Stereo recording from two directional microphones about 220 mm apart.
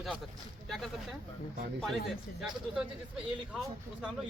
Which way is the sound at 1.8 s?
Centre (ahead or behind).